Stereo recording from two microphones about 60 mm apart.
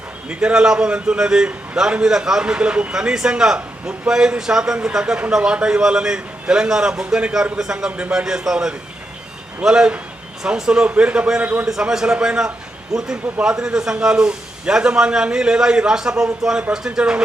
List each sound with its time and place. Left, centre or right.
0.3 s a man's voice: centre
11.6 s a man's voice: centre